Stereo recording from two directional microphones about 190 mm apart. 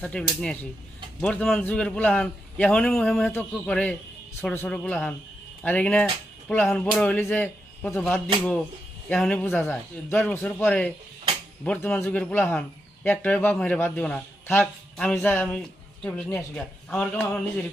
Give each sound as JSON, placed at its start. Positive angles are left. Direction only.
{"t": 0.0, "sound": "a man's voice", "side_deg": 5}
{"t": 9.0, "sound": "a man's voice", "side_deg": 5}